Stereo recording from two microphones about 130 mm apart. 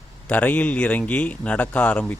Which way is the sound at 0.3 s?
10° left (ahead or behind).